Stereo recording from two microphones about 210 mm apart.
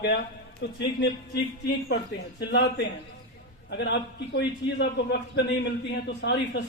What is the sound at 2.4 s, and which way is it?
A man's voice, 55° left (ahead or behind).